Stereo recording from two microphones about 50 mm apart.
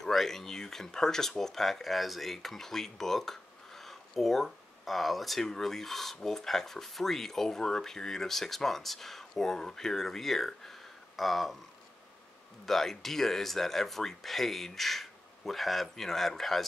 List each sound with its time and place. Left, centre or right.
0.0 s speech: centre
12.6 s speech: centre